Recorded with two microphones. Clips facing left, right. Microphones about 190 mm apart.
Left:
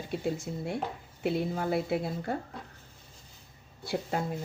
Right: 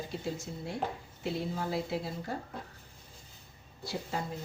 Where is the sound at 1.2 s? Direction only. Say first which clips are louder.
Left 5 dB; 60° left (ahead or behind).